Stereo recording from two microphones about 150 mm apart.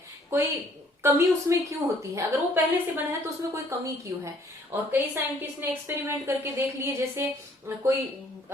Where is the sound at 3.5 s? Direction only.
20° right (ahead or behind).